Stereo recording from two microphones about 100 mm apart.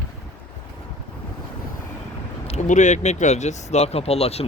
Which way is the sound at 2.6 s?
90° left.